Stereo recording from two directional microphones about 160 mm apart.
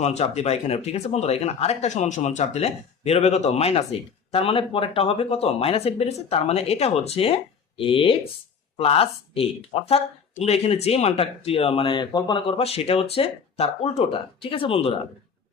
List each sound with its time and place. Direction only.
0.0 s speech: 45° left (ahead or behind)